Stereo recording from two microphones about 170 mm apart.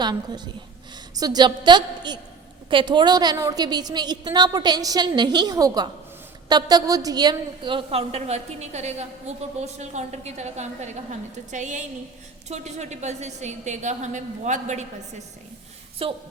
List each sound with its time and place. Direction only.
0.0 s a woman's voice: 25° right (ahead or behind); by 14.8 s 45° right (ahead or behind)
16.0 s a woman's voice: 35° right (ahead or behind)